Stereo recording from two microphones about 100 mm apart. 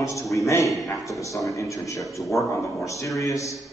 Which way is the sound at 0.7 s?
Centre (ahead or behind).